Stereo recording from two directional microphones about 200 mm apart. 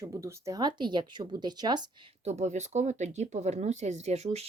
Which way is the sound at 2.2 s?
35° right (ahead or behind).